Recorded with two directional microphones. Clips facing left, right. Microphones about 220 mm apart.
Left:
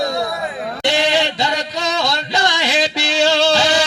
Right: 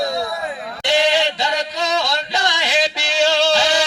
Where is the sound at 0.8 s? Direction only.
45° left (ahead or behind).